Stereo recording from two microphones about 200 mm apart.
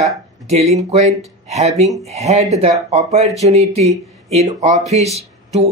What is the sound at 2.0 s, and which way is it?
Speech, 35° right (ahead or behind).